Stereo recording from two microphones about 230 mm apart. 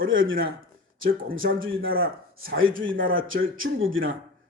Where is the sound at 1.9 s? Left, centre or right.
Right.